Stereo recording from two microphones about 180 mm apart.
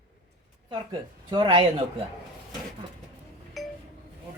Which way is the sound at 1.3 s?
25° right (ahead or behind).